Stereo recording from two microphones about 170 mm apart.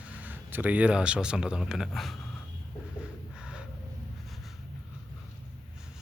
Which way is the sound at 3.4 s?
5° right (ahead or behind).